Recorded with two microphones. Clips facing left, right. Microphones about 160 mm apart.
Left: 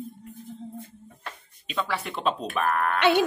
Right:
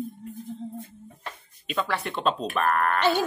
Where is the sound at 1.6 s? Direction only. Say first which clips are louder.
Right 1 dB; centre (ahead or behind).